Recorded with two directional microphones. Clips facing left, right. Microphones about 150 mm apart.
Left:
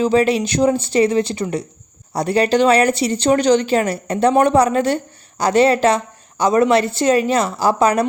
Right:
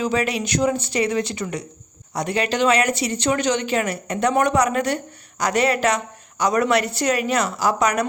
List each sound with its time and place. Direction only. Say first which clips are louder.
0.0 s a woman's voice: left 7 dB; 30° left (ahead or behind)